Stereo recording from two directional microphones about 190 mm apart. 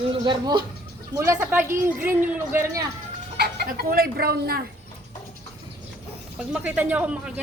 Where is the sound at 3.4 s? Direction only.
55° right (ahead or behind).